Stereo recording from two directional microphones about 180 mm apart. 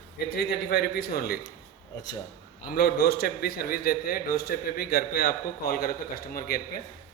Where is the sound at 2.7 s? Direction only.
60° left (ahead or behind).